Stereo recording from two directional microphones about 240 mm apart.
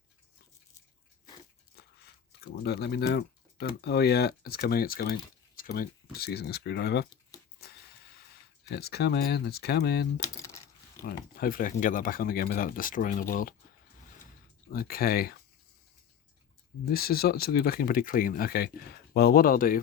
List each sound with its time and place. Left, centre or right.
1.7 s speech: left
7.6 s vehicle: left
8.7 s speech: left
14.7 s speech: left
16.9 s speech: left